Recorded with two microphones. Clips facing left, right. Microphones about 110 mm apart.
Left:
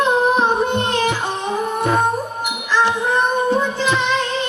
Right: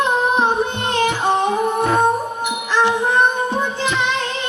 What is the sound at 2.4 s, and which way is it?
Music, 15° right (ahead or behind).